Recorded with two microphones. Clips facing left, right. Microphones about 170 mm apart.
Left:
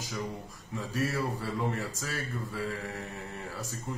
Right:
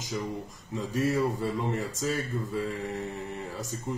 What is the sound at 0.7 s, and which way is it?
Speech, 20° right (ahead or behind).